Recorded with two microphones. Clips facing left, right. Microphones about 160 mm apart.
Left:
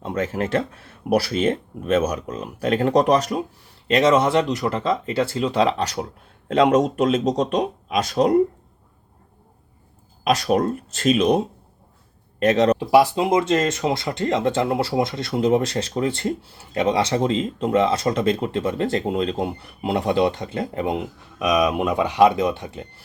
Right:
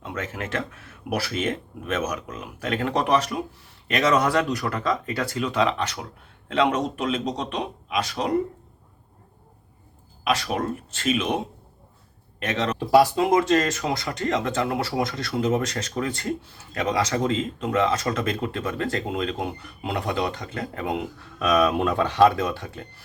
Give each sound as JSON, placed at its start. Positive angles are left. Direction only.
{"t": 0.0, "sound": "speech", "side_deg": 35}
{"t": 3.8, "sound": "speech", "side_deg": 30}
{"t": 10.2, "sound": "speech", "side_deg": 40}
{"t": 12.4, "sound": "speech", "side_deg": 40}
{"t": 12.8, "sound": "speech", "side_deg": 15}
{"t": 21.3, "sound": "speech", "side_deg": 15}